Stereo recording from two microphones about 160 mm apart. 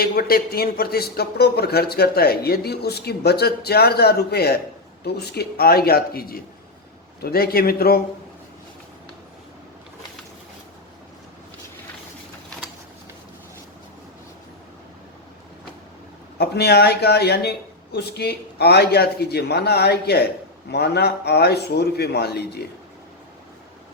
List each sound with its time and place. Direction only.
0.0 s a man's voice: 70° left (ahead or behind)
16.4 s speech: 90° left